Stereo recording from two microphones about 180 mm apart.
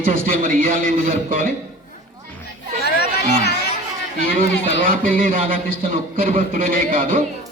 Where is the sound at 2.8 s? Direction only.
65° left (ahead or behind).